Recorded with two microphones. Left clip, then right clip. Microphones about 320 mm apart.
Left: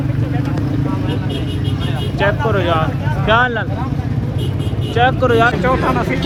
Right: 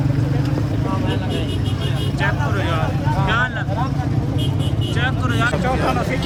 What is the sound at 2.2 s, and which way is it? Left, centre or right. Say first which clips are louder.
Speech: left 7 dB; centre.